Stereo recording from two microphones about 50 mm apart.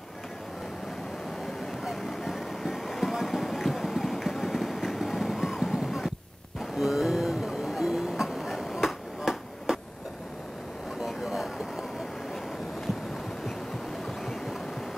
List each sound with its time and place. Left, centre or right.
2.2 s music: centre
6.6 s vehicle: centre
11.0 s vehicle: centre